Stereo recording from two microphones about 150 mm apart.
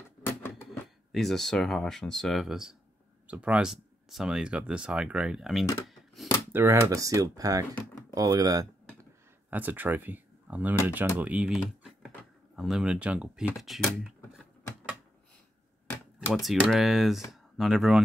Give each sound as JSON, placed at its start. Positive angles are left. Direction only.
{"t": 0.2, "sound": "a sound", "side_deg": 15}
{"t": 0.7, "sound": "speech", "side_deg": 0}
{"t": 6.5, "sound": "speech", "side_deg": -15}
{"t": 9.5, "sound": "speech", "side_deg": -10}
{"t": 16.3, "sound": "speech", "side_deg": 0}